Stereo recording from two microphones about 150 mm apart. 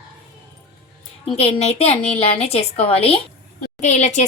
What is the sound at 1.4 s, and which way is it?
A woman's voice, 40° left (ahead or behind).